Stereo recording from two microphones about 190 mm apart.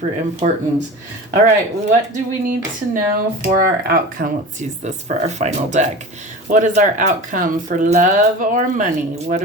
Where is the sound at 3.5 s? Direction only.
50° right (ahead or behind).